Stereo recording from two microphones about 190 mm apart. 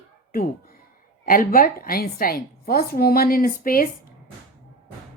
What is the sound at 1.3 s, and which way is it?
A woman's voice, 50° left (ahead or behind).